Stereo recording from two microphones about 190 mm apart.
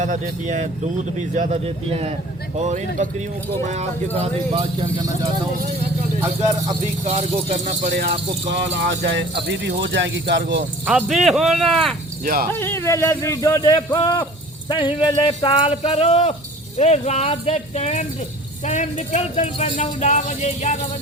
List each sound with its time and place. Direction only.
0.0 s speech: 40° right (ahead or behind)
4.2 s speech: 25° right (ahead or behind)
7.0 s speech: 35° right (ahead or behind)
8.4 s speech: 70° right (ahead or behind)
10.8 s speech: 5° right (ahead or behind)
12.2 s speech: 50° right (ahead or behind)
12.5 s speech: 15° left (ahead or behind); by 20.7 s 40° left (ahead or behind)